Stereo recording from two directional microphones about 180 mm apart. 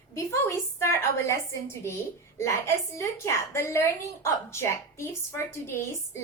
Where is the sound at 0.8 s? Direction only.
15° left (ahead or behind).